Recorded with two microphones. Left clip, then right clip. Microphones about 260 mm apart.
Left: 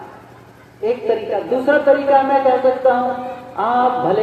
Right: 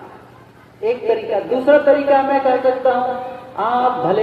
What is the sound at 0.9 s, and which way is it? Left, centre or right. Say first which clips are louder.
A woman's voice: even; right.